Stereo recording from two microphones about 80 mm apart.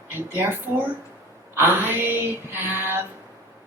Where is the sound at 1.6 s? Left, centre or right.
Right.